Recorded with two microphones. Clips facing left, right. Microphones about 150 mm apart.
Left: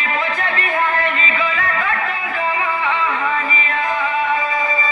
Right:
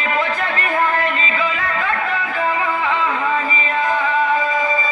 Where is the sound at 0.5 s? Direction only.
35° right (ahead or behind).